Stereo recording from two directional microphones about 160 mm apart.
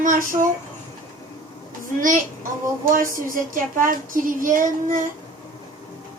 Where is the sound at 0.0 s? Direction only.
55° right (ahead or behind).